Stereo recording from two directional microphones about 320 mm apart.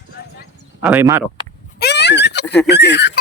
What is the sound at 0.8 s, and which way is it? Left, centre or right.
Speech, centre.